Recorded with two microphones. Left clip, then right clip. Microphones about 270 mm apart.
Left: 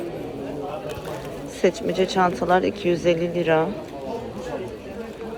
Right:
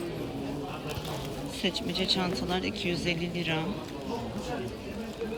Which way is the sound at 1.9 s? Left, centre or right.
Left.